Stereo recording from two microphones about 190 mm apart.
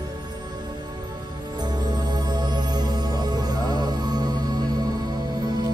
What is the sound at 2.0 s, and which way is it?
Music, 20° right (ahead or behind).